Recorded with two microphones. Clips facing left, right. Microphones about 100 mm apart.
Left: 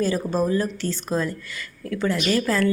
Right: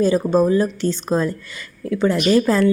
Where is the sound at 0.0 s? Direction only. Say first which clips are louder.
Right 7 dB; 20° right (ahead or behind).